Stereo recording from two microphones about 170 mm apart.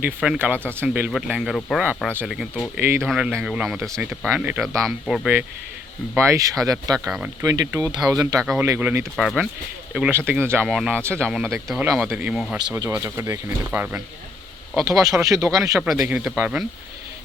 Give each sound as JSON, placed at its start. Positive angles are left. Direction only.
{"t": 0.0, "sound": "speech", "side_deg": -10}
{"t": 6.1, "sound": "speech", "side_deg": -20}
{"t": 7.0, "sound": "speech", "side_deg": -5}
{"t": 7.4, "sound": "speech", "side_deg": -20}
{"t": 8.4, "sound": "speech", "side_deg": 0}
{"t": 8.6, "sound": "speech", "side_deg": -15}
{"t": 9.1, "sound": "speech", "side_deg": 0}
{"t": 12.7, "sound": "speech", "side_deg": -15}
{"t": 14.8, "sound": "speech", "side_deg": -20}
{"t": 15.8, "sound": "speech", "side_deg": -5}